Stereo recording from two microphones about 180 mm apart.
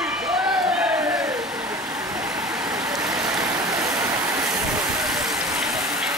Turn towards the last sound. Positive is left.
turn(degrees=-5)  # may be behind; listen again after turning